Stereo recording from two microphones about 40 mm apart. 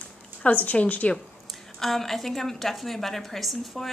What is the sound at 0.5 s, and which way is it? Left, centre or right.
Speech, left.